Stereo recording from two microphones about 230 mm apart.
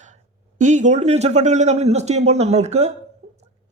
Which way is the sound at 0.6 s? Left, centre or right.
Right.